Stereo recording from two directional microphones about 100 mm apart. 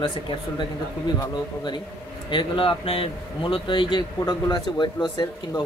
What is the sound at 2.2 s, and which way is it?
Speech, 55° left (ahead or behind).